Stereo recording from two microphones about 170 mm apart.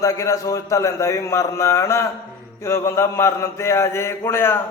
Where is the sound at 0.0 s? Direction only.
20° left (ahead or behind).